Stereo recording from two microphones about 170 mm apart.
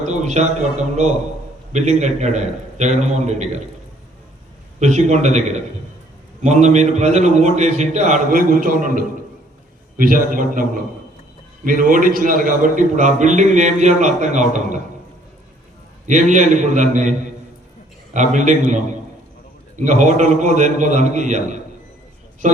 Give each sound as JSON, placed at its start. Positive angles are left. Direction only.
{"t": 0.0, "sound": "a man's voice", "side_deg": -45}
{"t": 4.8, "sound": "a man's voice", "side_deg": -45}
{"t": 16.0, "sound": "a man's voice", "side_deg": -45}
{"t": 19.8, "sound": "a man's voice", "side_deg": -45}